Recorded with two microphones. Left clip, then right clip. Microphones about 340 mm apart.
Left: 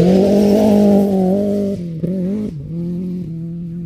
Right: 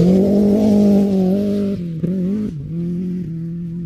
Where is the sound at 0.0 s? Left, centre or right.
Left.